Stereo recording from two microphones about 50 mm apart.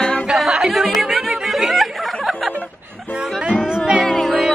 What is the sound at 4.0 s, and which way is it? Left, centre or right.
Music, centre.